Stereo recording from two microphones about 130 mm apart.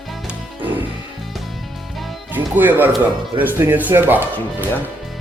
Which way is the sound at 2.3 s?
15° right (ahead or behind).